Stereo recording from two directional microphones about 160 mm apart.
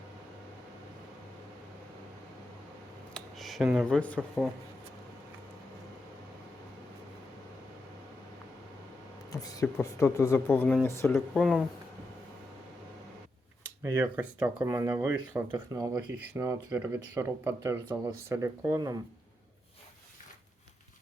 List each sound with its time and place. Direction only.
3.2 s a sound: centre (ahead or behind)
3.8 s speech: 10° left (ahead or behind)
9.3 s speech: 20° left (ahead or behind)
11.3 s speech: centre (ahead or behind)
13.8 s speech: 10° right (ahead or behind)